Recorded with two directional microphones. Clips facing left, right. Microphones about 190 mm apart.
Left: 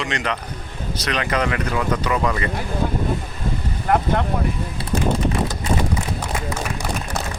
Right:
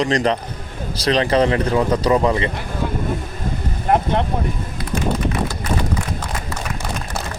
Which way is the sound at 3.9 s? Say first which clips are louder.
Right 2 dB; 25° right (ahead or behind).